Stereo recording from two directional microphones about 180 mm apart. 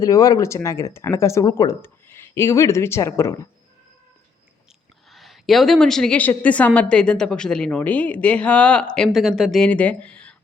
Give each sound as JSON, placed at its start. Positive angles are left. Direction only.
{"t": 0.0, "sound": "speech", "side_deg": 20}
{"t": 5.1, "sound": "a woman's voice", "side_deg": 0}